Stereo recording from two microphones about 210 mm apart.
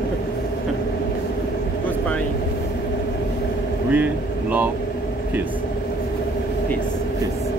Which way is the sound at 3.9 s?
5° right (ahead or behind).